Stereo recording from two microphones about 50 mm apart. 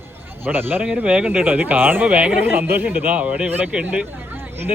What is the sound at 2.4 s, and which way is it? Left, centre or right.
Speech, right.